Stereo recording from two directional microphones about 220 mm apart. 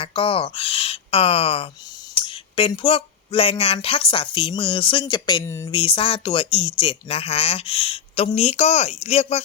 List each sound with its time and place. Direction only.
0.0 s speech: 25° left (ahead or behind)
5.7 s speech: 25° left (ahead or behind)